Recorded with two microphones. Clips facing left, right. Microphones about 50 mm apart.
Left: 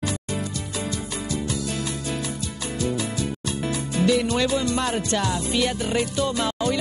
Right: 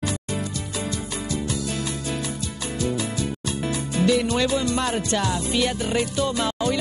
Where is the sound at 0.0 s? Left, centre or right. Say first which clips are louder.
Even; centre.